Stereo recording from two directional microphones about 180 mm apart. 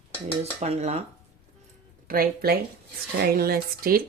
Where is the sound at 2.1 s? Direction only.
55° right (ahead or behind).